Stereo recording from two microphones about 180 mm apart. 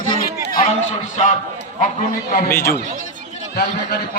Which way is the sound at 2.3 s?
55° left (ahead or behind).